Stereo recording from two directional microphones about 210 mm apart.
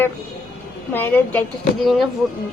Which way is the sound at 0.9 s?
10° left (ahead or behind).